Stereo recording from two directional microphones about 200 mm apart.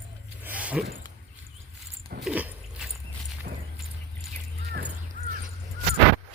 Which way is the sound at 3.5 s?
50° right (ahead or behind).